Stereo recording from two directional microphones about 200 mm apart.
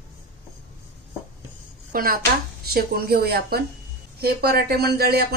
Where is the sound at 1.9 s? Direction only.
45° right (ahead or behind).